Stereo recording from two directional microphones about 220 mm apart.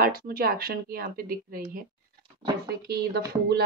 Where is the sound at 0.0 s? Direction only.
40° right (ahead or behind).